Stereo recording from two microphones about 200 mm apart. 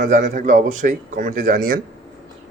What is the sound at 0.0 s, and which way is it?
Speech, 40° right (ahead or behind).